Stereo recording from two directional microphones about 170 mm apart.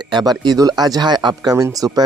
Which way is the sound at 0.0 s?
25° right (ahead or behind).